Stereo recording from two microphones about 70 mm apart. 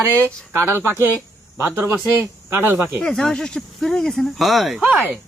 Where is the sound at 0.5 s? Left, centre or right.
Right.